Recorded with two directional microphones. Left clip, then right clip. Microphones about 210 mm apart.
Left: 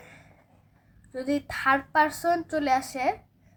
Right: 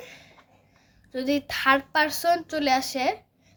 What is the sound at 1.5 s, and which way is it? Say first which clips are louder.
A woman's voice: right 2 dB; 25° right (ahead or behind).